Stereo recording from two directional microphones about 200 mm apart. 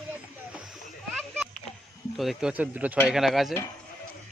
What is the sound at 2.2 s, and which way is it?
Speech, centre (ahead or behind).